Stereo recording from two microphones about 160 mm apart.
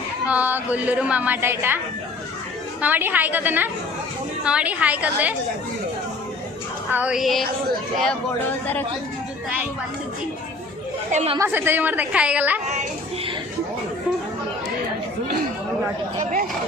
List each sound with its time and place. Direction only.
0.3 s a woman's voice: 10° right (ahead or behind)
2.8 s a woman's voice: 10° right (ahead or behind)
6.9 s music: 5° right (ahead or behind)
8.0 s speech: 10° left (ahead or behind)
11.1 s speech: 45° right (ahead or behind)
11.3 s a woman's voice: 15° right (ahead or behind)